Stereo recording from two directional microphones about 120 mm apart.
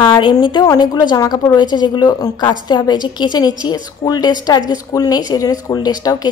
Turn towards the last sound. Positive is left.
turn(degrees=35)  # may be behind; listen again after turning